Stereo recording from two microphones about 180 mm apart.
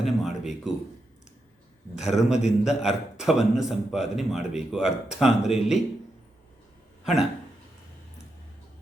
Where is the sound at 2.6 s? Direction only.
5° right (ahead or behind).